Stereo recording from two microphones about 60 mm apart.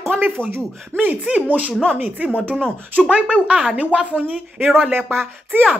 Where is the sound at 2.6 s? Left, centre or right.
Centre.